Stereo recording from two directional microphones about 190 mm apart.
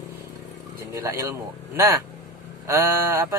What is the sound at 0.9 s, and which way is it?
Speech, 15° right (ahead or behind).